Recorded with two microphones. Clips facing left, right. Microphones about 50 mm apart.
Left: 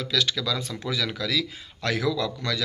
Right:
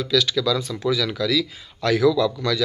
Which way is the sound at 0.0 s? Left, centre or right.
Left.